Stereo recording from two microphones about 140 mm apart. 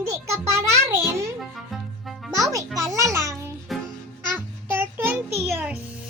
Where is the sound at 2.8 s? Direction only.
20° right (ahead or behind).